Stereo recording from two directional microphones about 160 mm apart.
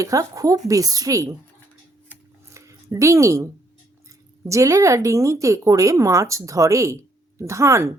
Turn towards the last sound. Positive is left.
turn(degrees=-20)  # may be behind; listen again after turning